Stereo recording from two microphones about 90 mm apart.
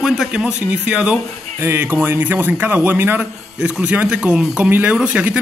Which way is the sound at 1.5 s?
25° right (ahead or behind).